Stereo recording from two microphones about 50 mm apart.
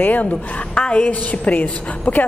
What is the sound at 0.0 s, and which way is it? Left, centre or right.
A woman's voice, left.